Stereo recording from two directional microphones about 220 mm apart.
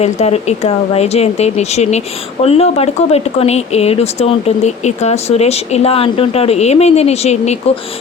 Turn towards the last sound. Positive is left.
turn(degrees=30)  # may be behind; listen again after turning